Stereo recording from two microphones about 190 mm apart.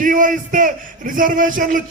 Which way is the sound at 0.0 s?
45° right (ahead or behind).